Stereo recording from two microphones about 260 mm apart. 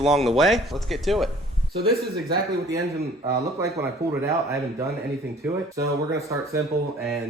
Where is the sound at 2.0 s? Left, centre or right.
Right.